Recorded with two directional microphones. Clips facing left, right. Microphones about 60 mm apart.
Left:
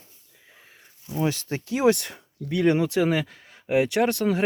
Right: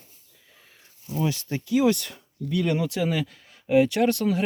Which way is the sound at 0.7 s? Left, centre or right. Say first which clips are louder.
Right 1 dB; left.